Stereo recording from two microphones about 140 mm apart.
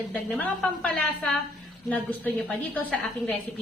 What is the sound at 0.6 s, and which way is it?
A woman's voice, 5° left (ahead or behind).